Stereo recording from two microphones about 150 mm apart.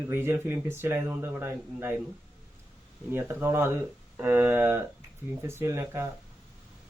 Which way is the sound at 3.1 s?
15° right (ahead or behind).